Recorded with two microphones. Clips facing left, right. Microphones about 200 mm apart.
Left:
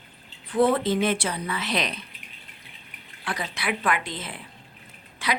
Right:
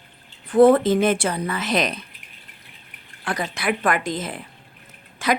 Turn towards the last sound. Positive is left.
turn(degrees=-45)  # may be behind; listen again after turning